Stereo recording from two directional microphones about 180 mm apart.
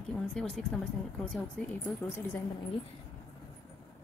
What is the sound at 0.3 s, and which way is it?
Speech, 5° left (ahead or behind).